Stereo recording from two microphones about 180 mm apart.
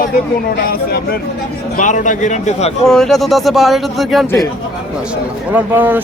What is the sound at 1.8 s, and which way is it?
Speech, 45° left (ahead or behind).